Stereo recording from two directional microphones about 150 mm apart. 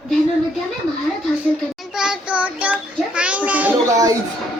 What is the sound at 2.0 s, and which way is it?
Child singing, 5° right (ahead or behind).